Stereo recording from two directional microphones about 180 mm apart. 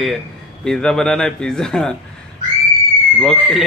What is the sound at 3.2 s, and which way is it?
Speech, 5° left (ahead or behind).